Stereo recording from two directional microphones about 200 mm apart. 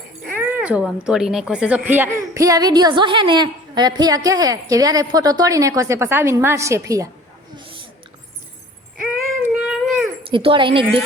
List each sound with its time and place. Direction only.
0.3 s speech: 10° right (ahead or behind)
7.5 s a sound: 25° right (ahead or behind)
9.4 s cat: 5° right (ahead or behind)
10.2 s speech: 25° right (ahead or behind)